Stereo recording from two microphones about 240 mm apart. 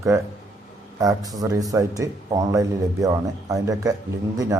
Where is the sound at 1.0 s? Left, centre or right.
Centre.